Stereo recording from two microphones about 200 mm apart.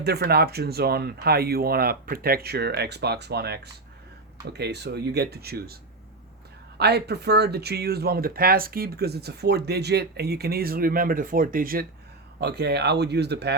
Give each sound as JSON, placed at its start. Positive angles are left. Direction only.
{"t": 0.0, "sound": "speech", "side_deg": -55}
{"t": 6.7, "sound": "speech", "side_deg": -55}